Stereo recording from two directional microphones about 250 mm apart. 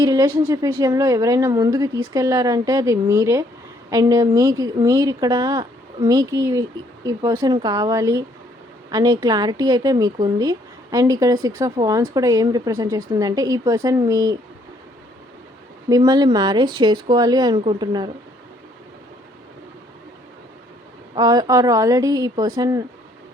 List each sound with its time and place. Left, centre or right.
0.0 s a woman's voice: centre
15.9 s a woman's voice: centre
21.2 s a woman's voice: centre